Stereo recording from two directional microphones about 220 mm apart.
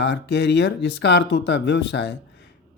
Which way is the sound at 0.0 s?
50° left (ahead or behind).